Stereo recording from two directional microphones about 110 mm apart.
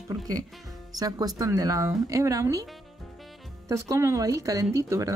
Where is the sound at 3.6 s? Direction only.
30° right (ahead or behind).